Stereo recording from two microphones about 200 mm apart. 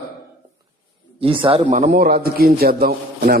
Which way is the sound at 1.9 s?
50° right (ahead or behind).